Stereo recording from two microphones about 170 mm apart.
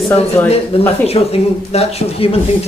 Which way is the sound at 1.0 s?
35° left (ahead or behind).